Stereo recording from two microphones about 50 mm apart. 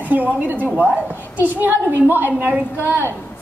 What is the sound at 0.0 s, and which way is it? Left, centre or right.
A woman's voice, right.